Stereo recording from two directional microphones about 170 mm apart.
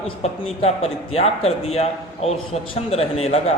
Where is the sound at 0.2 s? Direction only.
35° left (ahead or behind).